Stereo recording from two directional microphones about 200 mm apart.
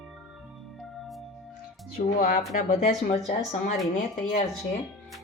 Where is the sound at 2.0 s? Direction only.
40° left (ahead or behind).